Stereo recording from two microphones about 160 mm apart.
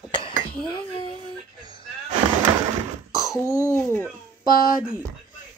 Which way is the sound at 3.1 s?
20° left (ahead or behind).